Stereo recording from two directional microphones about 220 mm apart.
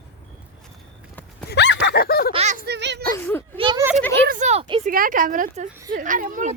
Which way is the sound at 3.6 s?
20° right (ahead or behind).